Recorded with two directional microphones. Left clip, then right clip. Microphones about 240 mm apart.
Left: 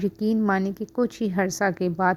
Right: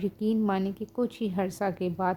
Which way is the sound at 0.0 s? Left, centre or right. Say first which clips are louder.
Left 4 dB; left.